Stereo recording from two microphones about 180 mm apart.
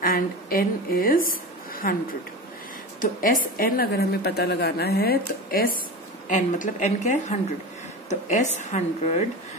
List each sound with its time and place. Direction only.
0.0 s a woman's voice: 55° left (ahead or behind)
3.0 s a woman's voice: 50° left (ahead or behind)
6.2 s a woman's voice: 45° left (ahead or behind)